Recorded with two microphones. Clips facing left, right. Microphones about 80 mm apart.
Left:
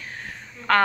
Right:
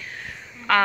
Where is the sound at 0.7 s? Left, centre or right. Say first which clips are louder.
Even; left.